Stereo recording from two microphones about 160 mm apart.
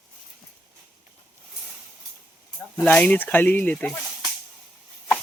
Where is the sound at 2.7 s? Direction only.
10° left (ahead or behind).